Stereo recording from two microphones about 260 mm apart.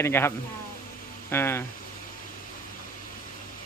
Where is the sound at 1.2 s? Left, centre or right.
Centre.